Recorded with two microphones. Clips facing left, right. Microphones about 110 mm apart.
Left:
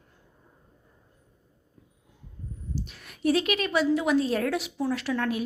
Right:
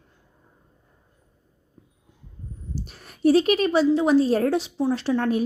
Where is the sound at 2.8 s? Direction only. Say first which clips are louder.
Right 6 dB; 35° right (ahead or behind).